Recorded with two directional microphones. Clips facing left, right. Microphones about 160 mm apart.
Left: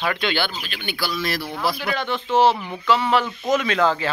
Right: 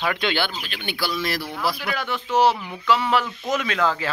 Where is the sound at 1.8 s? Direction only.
5° right (ahead or behind).